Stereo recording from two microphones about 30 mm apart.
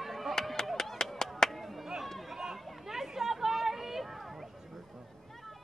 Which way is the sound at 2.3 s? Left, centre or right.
Centre.